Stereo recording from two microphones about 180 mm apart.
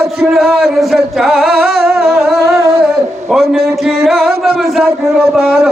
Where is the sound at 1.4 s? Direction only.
60° right (ahead or behind).